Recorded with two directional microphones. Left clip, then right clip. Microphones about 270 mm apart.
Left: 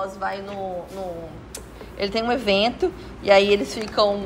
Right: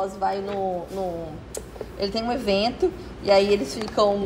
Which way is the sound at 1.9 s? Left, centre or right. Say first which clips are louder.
Left 3 dB; centre.